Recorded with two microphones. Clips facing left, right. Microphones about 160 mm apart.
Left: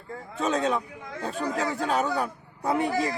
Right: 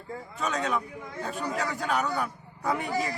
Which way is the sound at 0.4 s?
30° left (ahead or behind).